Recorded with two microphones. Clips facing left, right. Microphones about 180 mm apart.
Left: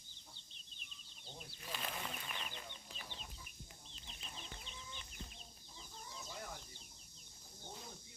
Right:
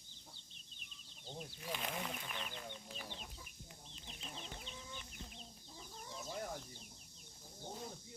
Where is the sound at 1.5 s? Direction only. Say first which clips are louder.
Right 2 dB; 15° right (ahead or behind).